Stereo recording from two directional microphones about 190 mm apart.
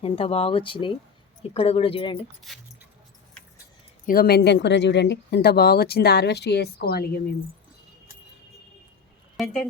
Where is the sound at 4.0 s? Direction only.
50° left (ahead or behind).